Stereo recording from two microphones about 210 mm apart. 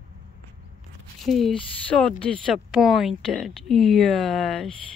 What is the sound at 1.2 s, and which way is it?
Speech, centre (ahead or behind).